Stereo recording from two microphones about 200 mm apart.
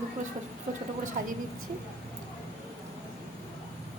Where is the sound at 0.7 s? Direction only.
40° right (ahead or behind).